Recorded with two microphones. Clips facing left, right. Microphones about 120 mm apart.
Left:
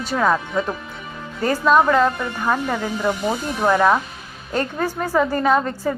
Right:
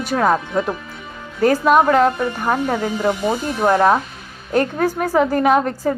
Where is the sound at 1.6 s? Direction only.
15° right (ahead or behind).